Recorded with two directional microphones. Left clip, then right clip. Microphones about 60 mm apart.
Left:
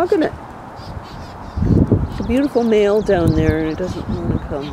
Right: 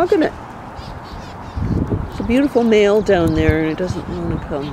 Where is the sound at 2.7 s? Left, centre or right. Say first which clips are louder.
Right 1 dB; centre.